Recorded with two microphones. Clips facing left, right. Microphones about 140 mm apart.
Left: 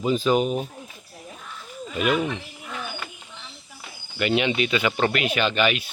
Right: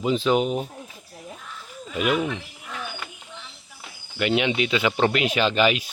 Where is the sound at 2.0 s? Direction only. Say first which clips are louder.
Even; 10° right (ahead or behind).